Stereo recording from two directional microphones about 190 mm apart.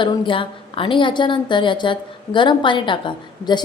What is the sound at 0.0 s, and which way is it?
A woman's voice, 25° left (ahead or behind).